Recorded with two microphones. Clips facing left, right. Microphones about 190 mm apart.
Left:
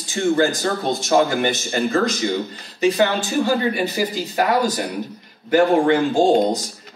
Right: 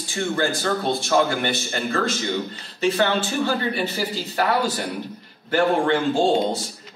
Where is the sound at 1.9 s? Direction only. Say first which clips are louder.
Left 2 dB; 15° left (ahead or behind).